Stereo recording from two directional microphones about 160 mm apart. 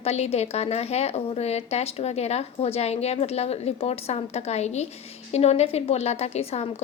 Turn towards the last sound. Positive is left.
turn(degrees=40)  # may be behind; listen again after turning